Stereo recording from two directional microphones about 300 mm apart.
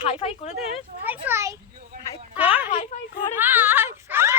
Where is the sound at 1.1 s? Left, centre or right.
Centre.